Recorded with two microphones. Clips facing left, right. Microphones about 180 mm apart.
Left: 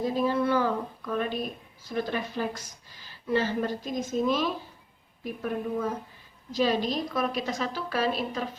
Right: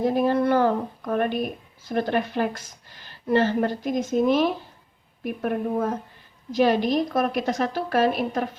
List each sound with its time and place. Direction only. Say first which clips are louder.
0.0 s a woman's voice: right 5 dB; 60° right (ahead or behind)